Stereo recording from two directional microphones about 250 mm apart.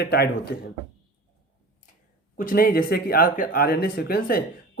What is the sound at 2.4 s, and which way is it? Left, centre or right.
Speech, left.